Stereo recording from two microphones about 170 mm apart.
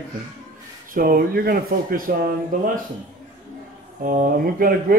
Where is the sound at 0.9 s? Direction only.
60° right (ahead or behind).